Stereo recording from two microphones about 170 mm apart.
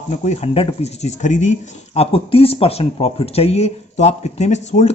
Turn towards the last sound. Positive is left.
turn(degrees=40)  # may be behind; listen again after turning